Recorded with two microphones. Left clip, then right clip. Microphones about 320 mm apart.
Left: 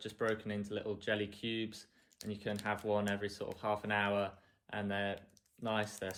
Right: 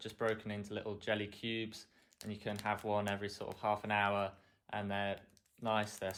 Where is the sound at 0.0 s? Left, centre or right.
Centre.